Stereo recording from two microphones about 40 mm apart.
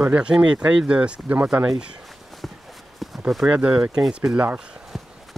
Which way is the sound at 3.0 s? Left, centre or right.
Centre.